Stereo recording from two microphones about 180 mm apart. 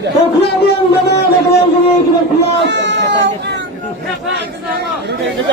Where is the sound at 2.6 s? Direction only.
80° right.